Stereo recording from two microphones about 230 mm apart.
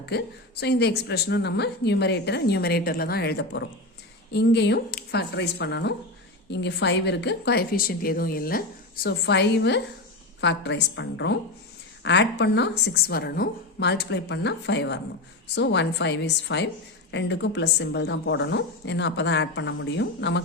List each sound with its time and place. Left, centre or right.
0.0 s a woman's voice: left